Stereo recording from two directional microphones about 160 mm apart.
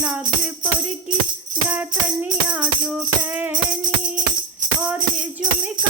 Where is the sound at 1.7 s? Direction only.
10° right (ahead or behind).